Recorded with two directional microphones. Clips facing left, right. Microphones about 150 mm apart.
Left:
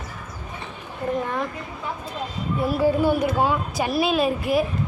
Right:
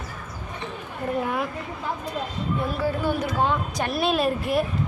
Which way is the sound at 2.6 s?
10° left (ahead or behind).